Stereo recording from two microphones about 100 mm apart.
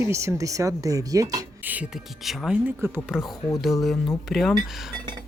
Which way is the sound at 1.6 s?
15° right (ahead or behind).